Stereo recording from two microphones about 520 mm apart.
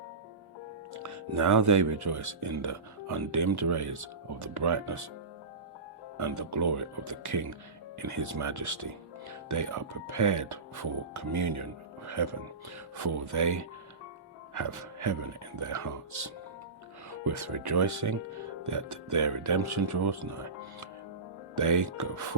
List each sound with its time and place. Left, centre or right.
0.9 s speech: right
6.1 s speech: right
13.3 s speech: right
21.6 s speech: right